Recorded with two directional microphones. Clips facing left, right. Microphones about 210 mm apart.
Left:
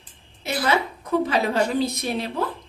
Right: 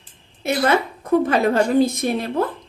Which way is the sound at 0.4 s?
50° right (ahead or behind).